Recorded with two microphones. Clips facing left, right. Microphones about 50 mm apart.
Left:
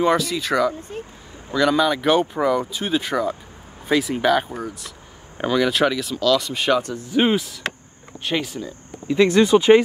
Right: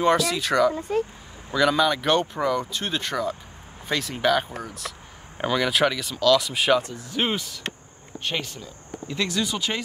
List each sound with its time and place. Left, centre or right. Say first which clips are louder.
0.0 s speech: left 1 dB; centre
9.0 s speech: left 11 dB; centre
9.3 s speech: left 17 dB; left